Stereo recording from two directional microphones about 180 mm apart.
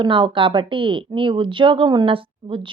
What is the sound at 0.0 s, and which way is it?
Speech, 30° right (ahead or behind).